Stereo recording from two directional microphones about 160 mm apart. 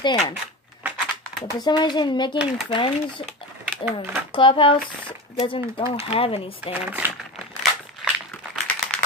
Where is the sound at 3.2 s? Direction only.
5° right (ahead or behind).